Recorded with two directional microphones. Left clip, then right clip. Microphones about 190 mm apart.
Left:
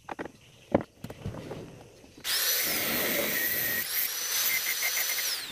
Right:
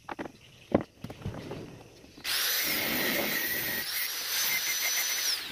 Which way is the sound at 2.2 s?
15° left (ahead or behind).